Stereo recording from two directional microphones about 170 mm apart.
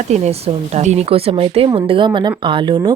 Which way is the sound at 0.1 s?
40° right (ahead or behind).